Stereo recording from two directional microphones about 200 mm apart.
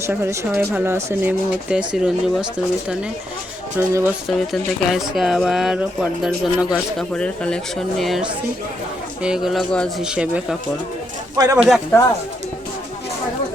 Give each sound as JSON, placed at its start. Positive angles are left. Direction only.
{"t": 0.0, "sound": "a woman's voice", "side_deg": -10}
{"t": 3.8, "sound": "a woman's voice", "side_deg": -10}
{"t": 4.3, "sound": "speech", "side_deg": 0}
{"t": 11.4, "sound": "speech", "side_deg": -20}
{"t": 11.7, "sound": "speech", "side_deg": 10}